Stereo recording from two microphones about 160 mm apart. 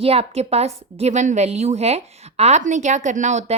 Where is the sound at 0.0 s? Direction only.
40° right (ahead or behind).